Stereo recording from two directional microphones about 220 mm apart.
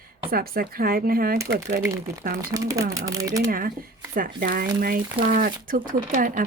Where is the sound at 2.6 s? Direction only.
15° right (ahead or behind).